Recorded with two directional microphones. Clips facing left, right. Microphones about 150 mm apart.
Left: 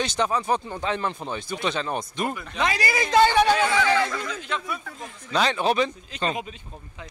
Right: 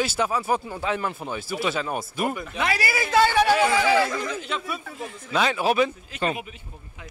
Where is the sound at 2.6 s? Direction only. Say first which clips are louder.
Left 1 dB; 20° left (ahead or behind).